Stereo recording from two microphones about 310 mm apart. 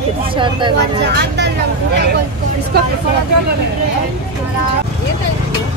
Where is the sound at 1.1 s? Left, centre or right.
Right.